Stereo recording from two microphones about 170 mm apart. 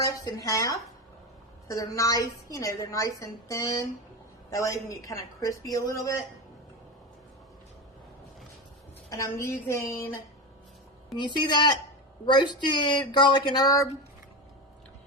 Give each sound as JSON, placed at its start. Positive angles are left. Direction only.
{"t": 0.0, "sound": "a woman's voice", "side_deg": 20}
{"t": 9.0, "sound": "a woman's voice", "side_deg": 20}
{"t": 11.3, "sound": "a woman's voice", "side_deg": 25}